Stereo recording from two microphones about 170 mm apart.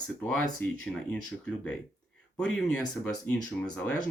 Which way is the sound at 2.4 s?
5° left (ahead or behind).